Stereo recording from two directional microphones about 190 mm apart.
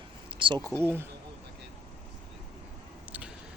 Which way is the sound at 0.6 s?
5° left (ahead or behind).